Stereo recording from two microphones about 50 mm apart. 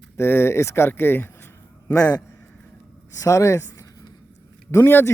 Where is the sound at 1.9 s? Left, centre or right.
Left.